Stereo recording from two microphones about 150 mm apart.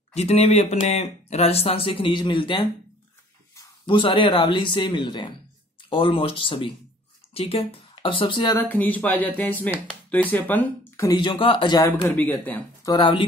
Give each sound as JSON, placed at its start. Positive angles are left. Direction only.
{"t": 0.1, "sound": "speech", "side_deg": 45}
{"t": 8.5, "sound": "speech", "side_deg": 10}
{"t": 11.1, "sound": "speech", "side_deg": 35}
{"t": 11.9, "sound": "speech", "side_deg": 10}
{"t": 12.8, "sound": "speech", "side_deg": 30}